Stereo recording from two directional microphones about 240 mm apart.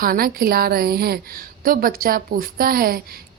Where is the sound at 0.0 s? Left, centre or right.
Right.